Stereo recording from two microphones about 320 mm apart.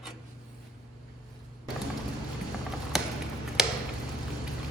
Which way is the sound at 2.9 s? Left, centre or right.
Centre.